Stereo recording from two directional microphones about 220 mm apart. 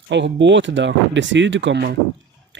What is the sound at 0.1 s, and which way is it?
Speech, 55° right (ahead or behind).